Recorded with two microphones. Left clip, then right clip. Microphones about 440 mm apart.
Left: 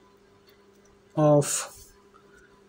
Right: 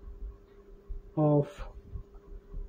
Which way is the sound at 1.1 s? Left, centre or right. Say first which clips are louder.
Left 7 dB; right.